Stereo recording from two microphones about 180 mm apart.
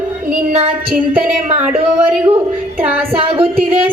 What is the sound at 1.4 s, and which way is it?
Speech, 40° right (ahead or behind).